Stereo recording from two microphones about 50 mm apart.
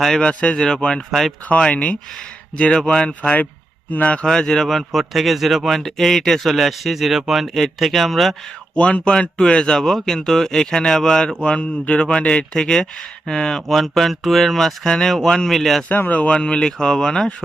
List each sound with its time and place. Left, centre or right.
0.2 s speech: centre
3.9 s speech: left
4.2 s speech: centre
8.7 s speech: left
9.7 s speech: centre
15.9 s speech: left; by 17.3 s centre